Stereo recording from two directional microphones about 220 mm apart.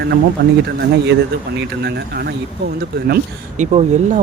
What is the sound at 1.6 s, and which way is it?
Speech, 50° right (ahead or behind).